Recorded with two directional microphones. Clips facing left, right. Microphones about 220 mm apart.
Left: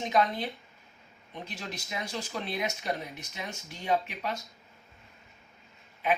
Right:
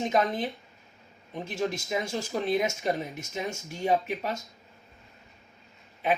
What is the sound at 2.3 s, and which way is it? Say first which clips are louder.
Speech: right 8 dB; 50° right (ahead or behind).